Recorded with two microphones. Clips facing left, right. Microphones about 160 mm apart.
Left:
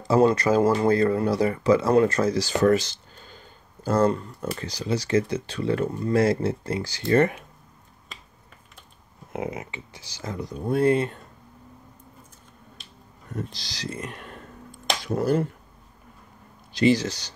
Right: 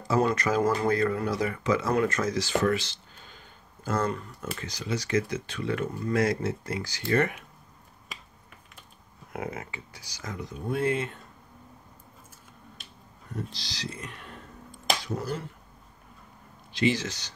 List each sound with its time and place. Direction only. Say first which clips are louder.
0.1 s speech: left 6 dB; 30° left (ahead or behind)
9.3 s speech: left 4 dB; 20° left (ahead or behind); by 11.1 s 35° left (ahead or behind)
13.5 s speech: left 4 dB; 45° left (ahead or behind)
16.7 s speech: left 6 dB; 35° left (ahead or behind)